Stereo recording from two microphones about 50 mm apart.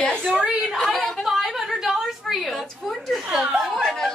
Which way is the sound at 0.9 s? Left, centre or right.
Centre.